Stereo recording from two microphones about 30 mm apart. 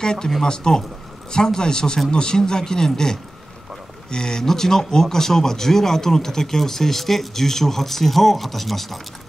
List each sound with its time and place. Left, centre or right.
0.0 s speech: left; by 9.0 s centre